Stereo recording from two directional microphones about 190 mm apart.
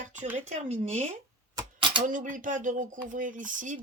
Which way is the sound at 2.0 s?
45° right (ahead or behind).